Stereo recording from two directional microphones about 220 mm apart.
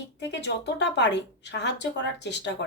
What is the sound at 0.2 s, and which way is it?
Speech, 50° left (ahead or behind).